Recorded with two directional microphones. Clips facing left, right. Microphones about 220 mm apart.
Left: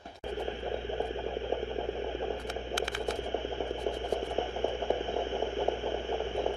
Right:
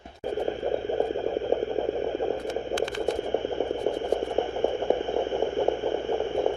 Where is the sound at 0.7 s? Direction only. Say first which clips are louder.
Right 8 dB; 45° right (ahead or behind).